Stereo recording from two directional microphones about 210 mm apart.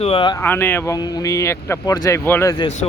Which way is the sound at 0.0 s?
25° left (ahead or behind).